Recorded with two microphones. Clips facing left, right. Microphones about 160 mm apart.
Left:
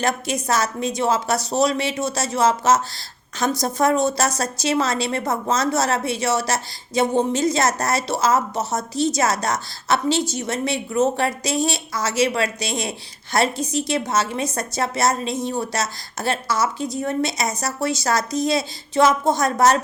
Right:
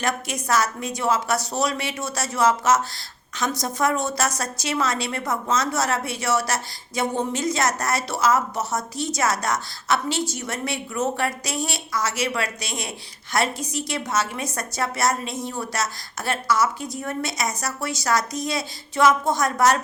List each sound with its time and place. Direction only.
0.0 s a woman's voice: 25° left (ahead or behind)